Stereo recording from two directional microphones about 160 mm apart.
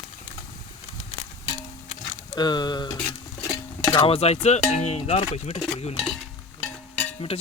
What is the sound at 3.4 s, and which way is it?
Music, 20° left (ahead or behind).